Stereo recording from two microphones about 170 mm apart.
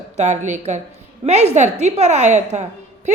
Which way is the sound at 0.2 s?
45° right (ahead or behind).